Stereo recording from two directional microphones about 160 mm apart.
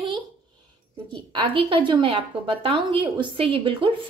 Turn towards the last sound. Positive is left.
turn(degrees=-35)  # may be behind; listen again after turning